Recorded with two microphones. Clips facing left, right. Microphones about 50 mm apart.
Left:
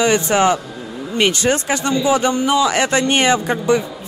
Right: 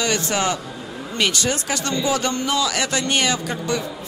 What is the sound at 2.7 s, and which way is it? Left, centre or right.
Speech, left.